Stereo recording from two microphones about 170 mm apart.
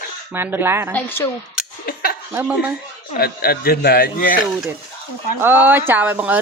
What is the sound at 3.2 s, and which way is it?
Speech, 65° left (ahead or behind).